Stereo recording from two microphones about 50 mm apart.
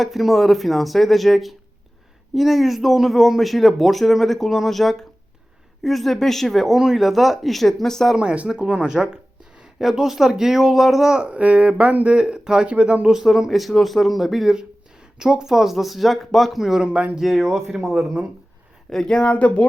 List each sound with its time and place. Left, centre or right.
0.0 s speech: centre
8.1 s speech: centre
13.1 s speech: centre
14.5 s speech: centre
16.8 s speech: right
17.2 s speech: centre
17.9 s speech: centre
18.9 s speech: centre
19.3 s speech: left